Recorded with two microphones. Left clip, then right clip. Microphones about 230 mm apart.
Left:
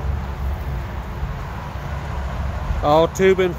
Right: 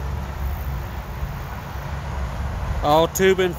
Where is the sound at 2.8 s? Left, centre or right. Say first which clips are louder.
Left 2 dB; centre.